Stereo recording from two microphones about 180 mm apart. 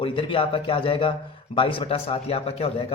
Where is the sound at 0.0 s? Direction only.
30° left (ahead or behind).